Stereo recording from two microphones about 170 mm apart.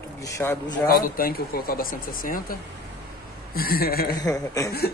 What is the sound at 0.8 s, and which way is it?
Speech, 60° left (ahead or behind).